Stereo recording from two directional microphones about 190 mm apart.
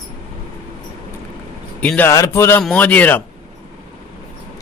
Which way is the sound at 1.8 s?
10° left (ahead or behind).